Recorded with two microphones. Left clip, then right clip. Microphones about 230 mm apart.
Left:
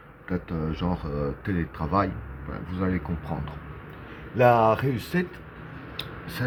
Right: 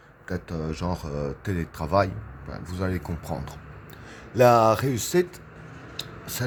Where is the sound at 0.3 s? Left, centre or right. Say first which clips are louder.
Left 1 dB; right.